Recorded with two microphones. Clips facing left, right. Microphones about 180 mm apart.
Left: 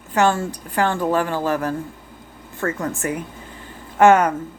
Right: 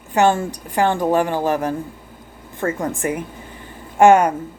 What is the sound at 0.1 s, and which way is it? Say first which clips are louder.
Speech: right 2 dB; 15° right (ahead or behind).